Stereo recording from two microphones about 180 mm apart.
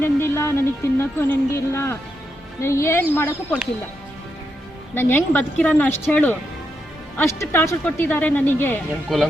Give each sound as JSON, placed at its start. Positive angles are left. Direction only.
{"t": 0.0, "sound": "speech", "side_deg": 15}
{"t": 4.9, "sound": "speech", "side_deg": 10}